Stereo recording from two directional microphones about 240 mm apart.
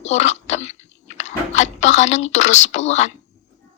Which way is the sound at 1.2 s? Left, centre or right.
Left.